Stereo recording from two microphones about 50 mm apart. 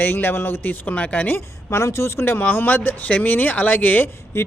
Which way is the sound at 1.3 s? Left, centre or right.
Left.